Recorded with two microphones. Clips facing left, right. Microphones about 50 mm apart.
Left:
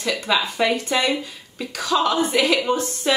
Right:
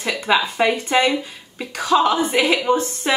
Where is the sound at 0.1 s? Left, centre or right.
Centre.